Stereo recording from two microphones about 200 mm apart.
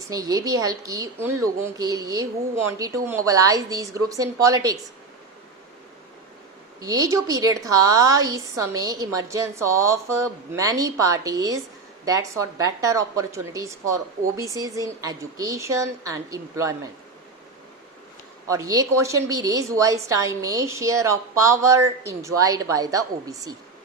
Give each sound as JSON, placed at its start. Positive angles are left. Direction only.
{"t": 0.1, "sound": "a woman's voice", "side_deg": -15}
{"t": 6.8, "sound": "a woman's voice", "side_deg": -15}
{"t": 18.4, "sound": "a woman's voice", "side_deg": -15}